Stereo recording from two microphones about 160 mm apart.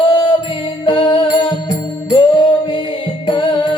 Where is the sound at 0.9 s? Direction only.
30° left (ahead or behind).